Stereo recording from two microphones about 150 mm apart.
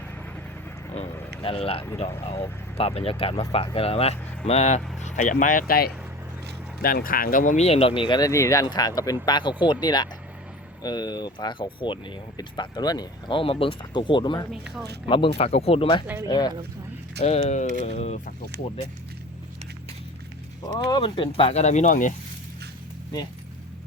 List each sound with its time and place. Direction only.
1.4 s speech: 40° left (ahead or behind)
5.0 s speech: 55° left (ahead or behind); by 5.9 s 85° left
6.8 s speech: 70° left (ahead or behind); by 14.4 s 30° left (ahead or behind)
14.5 s speech: 5° right (ahead or behind)
15.0 s speech: 40° left (ahead or behind)
17.2 s speech: 45° left (ahead or behind)
20.6 s speech: 25° left (ahead or behind); by 22.1 s 60° left (ahead or behind)